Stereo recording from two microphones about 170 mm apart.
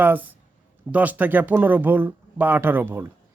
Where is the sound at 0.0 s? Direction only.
10° right (ahead or behind).